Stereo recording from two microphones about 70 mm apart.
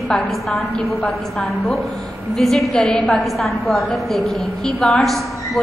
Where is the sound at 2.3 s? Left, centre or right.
Centre.